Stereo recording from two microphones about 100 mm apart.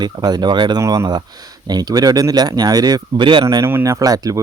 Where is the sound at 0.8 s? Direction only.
30° right (ahead or behind).